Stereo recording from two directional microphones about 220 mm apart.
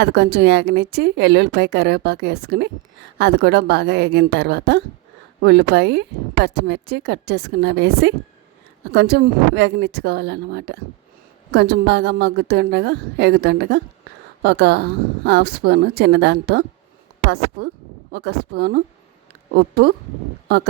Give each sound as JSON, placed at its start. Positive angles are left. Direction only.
{"t": 0.0, "sound": "speech", "side_deg": -50}